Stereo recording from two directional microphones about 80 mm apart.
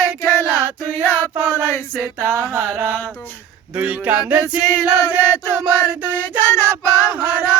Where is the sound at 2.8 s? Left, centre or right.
Left.